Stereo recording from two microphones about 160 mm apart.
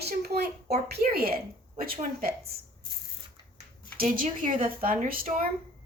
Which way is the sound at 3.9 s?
60° right (ahead or behind).